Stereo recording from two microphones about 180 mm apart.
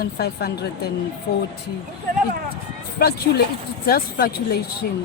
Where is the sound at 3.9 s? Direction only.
55° left (ahead or behind).